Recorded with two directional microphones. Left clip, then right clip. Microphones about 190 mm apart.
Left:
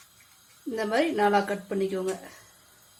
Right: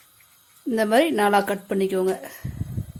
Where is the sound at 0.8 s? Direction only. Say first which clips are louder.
Right 5 dB; 50° right (ahead or behind).